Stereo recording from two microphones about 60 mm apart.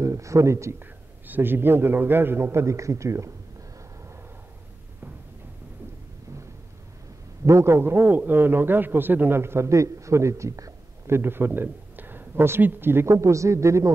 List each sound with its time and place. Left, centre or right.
0.0 s speech: right
0.7 s a man's voice: right
7.4 s a man's voice: right
11.1 s speech: right
13.1 s speech: right